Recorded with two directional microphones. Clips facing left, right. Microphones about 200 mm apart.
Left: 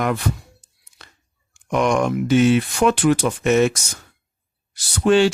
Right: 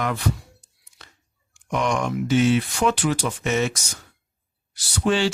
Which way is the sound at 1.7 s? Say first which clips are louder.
Left 5 dB; 50° left (ahead or behind).